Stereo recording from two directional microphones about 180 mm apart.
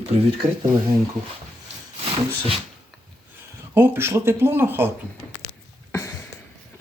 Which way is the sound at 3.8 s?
15° right (ahead or behind).